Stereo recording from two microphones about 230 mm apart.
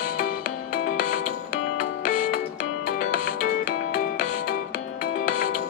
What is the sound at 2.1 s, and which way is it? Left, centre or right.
Music, left.